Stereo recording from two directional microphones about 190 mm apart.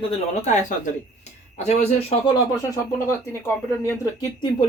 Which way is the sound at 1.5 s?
35° left (ahead or behind).